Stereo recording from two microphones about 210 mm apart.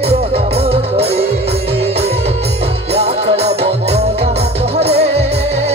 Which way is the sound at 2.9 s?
30° right (ahead or behind).